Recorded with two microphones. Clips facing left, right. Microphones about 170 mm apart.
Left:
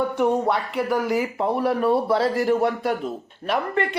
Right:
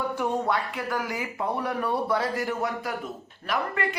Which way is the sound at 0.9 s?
20° left (ahead or behind).